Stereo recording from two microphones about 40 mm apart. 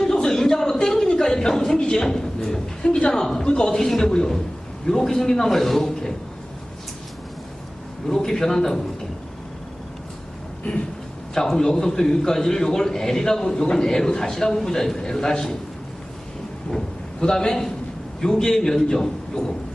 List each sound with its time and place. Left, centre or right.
0.0 s a sound: centre
1.9 s a man's voice: centre
8.0 s a man's voice: centre
11.3 s a man's voice: centre
16.7 s a man's voice: centre